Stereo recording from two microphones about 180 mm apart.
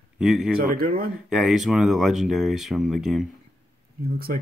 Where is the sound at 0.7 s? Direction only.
55° right (ahead or behind).